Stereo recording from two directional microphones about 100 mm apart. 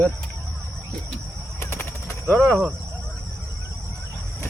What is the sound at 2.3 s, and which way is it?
Speech, 5° left (ahead or behind).